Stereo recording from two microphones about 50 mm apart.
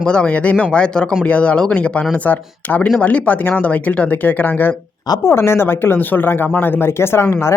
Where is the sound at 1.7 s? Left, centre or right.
Left.